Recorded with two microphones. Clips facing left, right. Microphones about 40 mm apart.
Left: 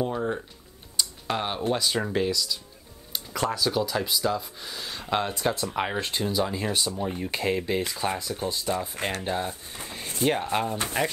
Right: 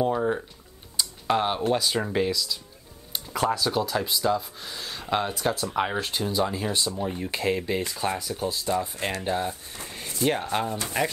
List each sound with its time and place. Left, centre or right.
0.0 s a sound: centre
0.9 s typing: centre
1.7 s speech: centre
6.7 s speech: left
7.0 s speech: centre